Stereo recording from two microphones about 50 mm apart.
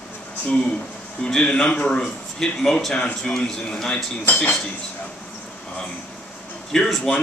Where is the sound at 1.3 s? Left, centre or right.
Centre.